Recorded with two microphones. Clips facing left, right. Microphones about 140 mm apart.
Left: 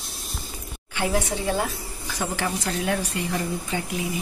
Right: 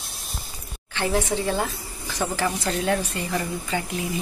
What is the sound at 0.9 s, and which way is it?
Speech, 10° left (ahead or behind).